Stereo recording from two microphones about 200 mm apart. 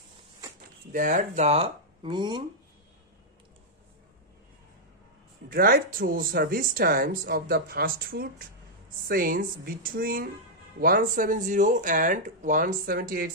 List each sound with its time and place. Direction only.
0.9 s speech: 40° right (ahead or behind); by 2.4 s 25° right (ahead or behind)
5.5 s speech: 45° right (ahead or behind)